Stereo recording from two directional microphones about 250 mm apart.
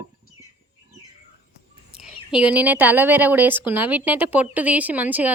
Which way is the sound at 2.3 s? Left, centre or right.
Centre.